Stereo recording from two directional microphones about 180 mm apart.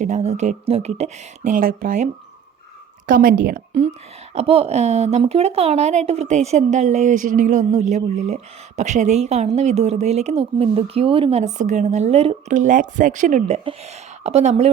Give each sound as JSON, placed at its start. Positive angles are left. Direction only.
{"t": 0.0, "sound": "speech", "side_deg": -40}
{"t": 3.1, "sound": "speech", "side_deg": -50}
{"t": 4.4, "sound": "speech", "side_deg": -35}